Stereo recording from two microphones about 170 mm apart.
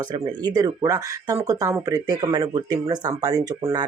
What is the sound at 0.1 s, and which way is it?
Speech, 25° right (ahead or behind).